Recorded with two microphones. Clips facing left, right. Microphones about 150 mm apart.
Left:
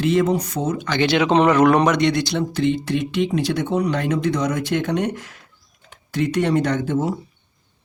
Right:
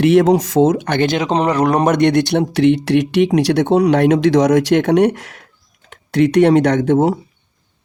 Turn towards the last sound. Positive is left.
turn(degrees=-75)  # may be behind; listen again after turning